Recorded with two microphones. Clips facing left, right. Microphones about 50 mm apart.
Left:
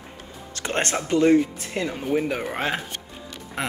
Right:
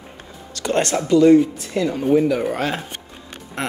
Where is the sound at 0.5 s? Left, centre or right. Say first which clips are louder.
Right 5 dB; left.